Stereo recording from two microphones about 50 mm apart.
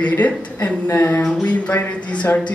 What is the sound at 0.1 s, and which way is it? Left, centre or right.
Speech, left.